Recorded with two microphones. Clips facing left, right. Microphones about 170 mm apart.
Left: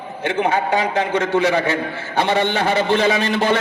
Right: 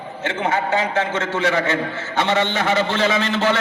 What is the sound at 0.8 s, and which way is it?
A man's voice, 15° left (ahead or behind).